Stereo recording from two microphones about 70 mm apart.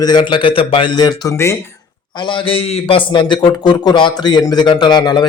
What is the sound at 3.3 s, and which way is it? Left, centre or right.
Speech, left.